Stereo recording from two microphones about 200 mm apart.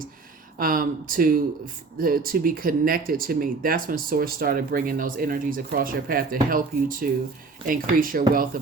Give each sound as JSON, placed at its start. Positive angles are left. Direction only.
{"t": 0.6, "sound": "speech", "side_deg": -45}